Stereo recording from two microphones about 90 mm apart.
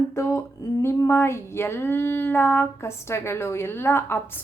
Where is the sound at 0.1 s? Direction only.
30° left (ahead or behind).